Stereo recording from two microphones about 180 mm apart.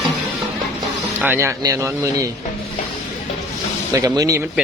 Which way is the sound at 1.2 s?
15° right (ahead or behind).